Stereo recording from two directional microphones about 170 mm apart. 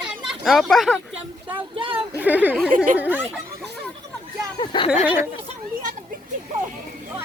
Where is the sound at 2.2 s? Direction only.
10° right (ahead or behind).